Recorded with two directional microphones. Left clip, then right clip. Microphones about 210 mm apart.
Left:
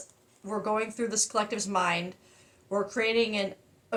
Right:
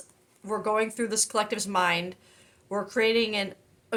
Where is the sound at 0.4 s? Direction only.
40° right (ahead or behind).